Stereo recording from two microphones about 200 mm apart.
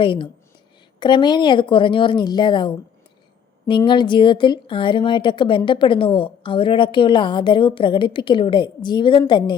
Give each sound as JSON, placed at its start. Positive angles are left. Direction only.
{"t": 0.0, "sound": "speech", "side_deg": 25}